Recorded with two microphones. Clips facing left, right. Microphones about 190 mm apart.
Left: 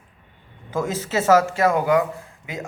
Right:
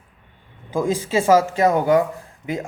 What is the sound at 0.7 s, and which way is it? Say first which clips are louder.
A man's voice: right 3 dB; 15° right (ahead or behind).